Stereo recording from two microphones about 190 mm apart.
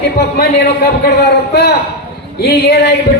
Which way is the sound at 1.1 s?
60° left (ahead or behind).